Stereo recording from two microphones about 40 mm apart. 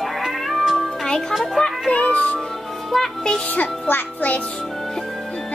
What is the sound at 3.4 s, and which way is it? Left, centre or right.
Music, left.